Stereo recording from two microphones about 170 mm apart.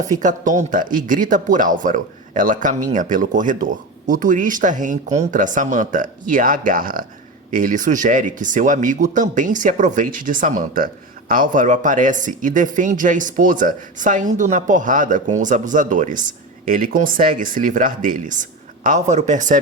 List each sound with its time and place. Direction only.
0.1 s speech: 50° right (ahead or behind)